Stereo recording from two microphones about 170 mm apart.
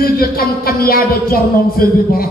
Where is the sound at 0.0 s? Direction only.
60° left (ahead or behind).